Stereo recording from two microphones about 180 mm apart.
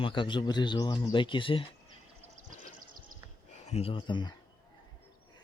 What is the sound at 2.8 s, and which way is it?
Horse, 50° right (ahead or behind).